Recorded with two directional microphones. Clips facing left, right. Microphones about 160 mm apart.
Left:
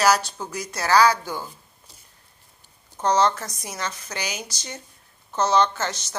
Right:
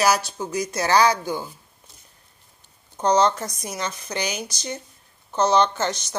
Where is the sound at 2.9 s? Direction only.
15° right (ahead or behind).